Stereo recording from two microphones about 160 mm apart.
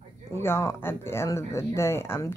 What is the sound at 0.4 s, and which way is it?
Speech, 15° left (ahead or behind).